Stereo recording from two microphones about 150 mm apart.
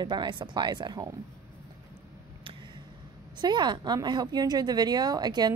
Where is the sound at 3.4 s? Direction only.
30° right (ahead or behind).